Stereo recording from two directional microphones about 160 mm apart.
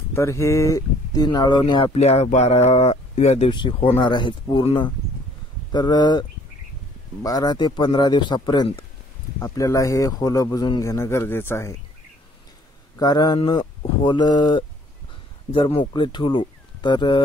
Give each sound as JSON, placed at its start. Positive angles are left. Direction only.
{"t": 0.1, "sound": "speech", "side_deg": 15}
{"t": 2.0, "sound": "speech", "side_deg": 40}
{"t": 3.4, "sound": "speech", "side_deg": 30}
{"t": 7.2, "sound": "speech", "side_deg": 25}
{"t": 13.0, "sound": "speech", "side_deg": 25}